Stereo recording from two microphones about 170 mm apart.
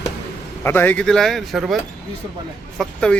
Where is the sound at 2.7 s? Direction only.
5° left (ahead or behind).